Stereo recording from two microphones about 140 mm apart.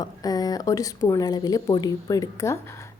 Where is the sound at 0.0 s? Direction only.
25° left (ahead or behind).